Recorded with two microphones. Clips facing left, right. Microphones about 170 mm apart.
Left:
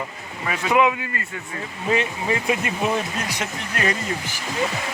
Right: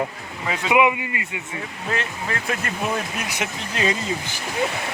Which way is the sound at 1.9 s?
10° left (ahead or behind).